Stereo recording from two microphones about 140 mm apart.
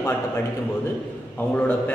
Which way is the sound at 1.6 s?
10° left (ahead or behind).